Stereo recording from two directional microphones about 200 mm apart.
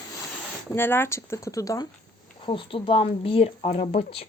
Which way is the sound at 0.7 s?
10° left (ahead or behind).